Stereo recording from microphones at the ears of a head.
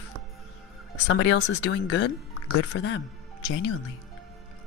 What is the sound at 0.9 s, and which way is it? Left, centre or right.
Speech, left.